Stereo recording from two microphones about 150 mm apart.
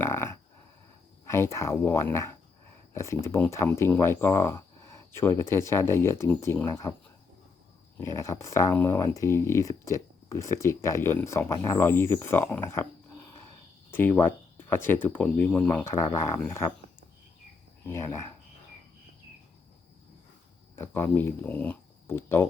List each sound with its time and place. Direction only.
0.0 s a sound: 15° left (ahead or behind)
1.3 s speech: 20° left (ahead or behind)
8.0 s speech: 20° left (ahead or behind)
13.9 s speech: 15° left (ahead or behind)
17.9 s speech: 20° left (ahead or behind)
20.7 s speech: 15° left (ahead or behind)